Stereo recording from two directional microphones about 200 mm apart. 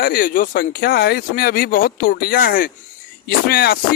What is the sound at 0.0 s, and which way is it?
Speech, 45° left (ahead or behind).